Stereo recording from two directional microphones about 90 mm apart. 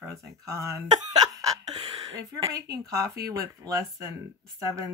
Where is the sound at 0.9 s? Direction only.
50° right (ahead or behind).